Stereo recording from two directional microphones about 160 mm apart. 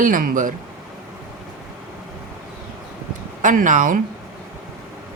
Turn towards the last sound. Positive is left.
turn(degrees=-55)  # may be behind; listen again after turning